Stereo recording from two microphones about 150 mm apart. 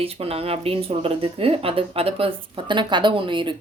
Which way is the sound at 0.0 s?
40° right (ahead or behind).